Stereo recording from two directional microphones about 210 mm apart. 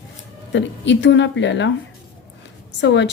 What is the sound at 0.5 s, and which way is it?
A woman's voice, 60° left (ahead or behind).